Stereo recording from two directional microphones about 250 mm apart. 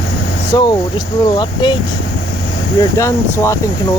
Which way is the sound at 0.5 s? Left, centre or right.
Centre.